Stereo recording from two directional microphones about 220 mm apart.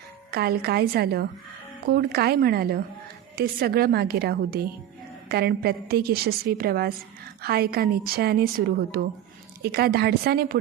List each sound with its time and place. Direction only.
0.3 s a woman's voice: 45° right (ahead or behind)